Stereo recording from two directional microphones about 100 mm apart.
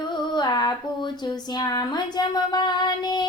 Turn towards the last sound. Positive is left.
turn(degrees=45)  # may be behind; listen again after turning